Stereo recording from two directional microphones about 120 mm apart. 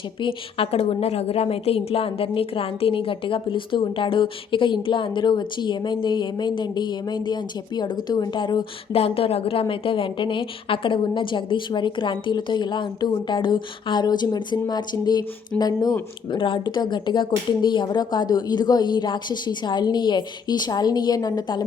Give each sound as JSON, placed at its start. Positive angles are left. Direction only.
{"t": 0.2, "sound": "a woman's voice", "side_deg": 50}
{"t": 9.0, "sound": "a woman's voice", "side_deg": 55}